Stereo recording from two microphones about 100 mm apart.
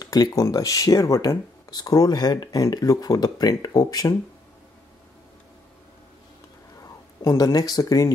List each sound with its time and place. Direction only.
0.0 s speech: 40° left (ahead or behind)
6.8 s speech: 35° left (ahead or behind)